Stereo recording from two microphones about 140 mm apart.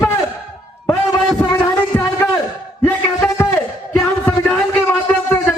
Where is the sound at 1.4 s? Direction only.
20° left (ahead or behind).